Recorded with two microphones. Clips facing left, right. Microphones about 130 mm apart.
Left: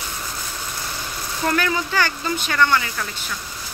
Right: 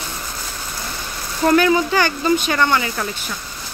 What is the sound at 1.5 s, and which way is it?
Speech, 20° right (ahead or behind).